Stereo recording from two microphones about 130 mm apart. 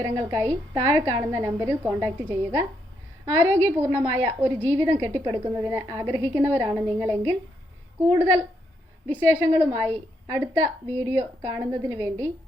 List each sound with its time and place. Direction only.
0.0 s a woman's voice: 25° right (ahead or behind)